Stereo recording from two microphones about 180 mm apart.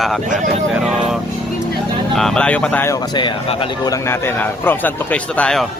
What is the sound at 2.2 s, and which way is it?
A man's voice, 5° left (ahead or behind).